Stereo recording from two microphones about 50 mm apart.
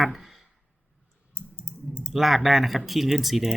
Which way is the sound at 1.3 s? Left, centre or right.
Left.